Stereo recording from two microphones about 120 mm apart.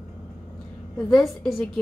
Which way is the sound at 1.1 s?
Centre (ahead or behind).